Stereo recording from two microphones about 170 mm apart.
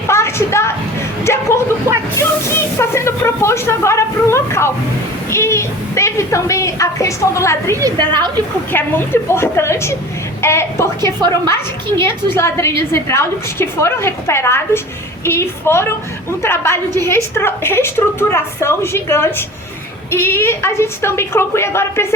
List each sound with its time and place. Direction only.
0.1 s a sound: 15° left (ahead or behind)
5.3 s a woman's voice: 15° left (ahead or behind)
7.8 s a woman's voice: 25° right (ahead or behind)
8.7 s a woman's voice: 15° left (ahead or behind)